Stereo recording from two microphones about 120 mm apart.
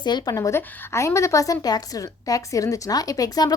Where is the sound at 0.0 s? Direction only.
35° left (ahead or behind).